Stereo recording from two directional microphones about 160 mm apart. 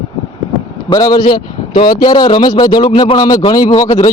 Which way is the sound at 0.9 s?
25° left (ahead or behind).